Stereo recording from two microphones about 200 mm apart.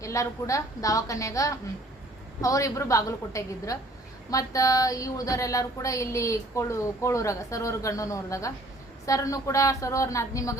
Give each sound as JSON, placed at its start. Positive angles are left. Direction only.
{"t": 0.0, "sound": "speech", "side_deg": 15}